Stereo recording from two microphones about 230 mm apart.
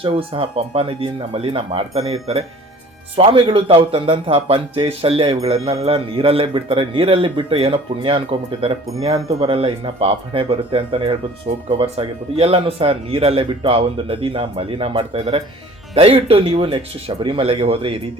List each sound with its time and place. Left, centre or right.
0.0 s speech: right